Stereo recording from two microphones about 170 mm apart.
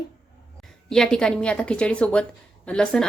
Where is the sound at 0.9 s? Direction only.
5° left (ahead or behind).